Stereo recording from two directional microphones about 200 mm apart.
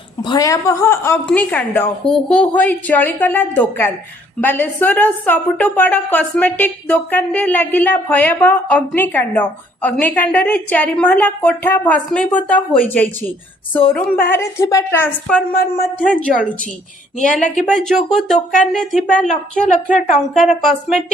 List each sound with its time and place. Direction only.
0.2 s a woman's voice: 20° left (ahead or behind)
17.4 s a woman's voice: 40° left (ahead or behind)
17.8 s speech: centre (ahead or behind)
18.3 s a woman's voice: 40° left (ahead or behind)
20.6 s speech: centre (ahead or behind)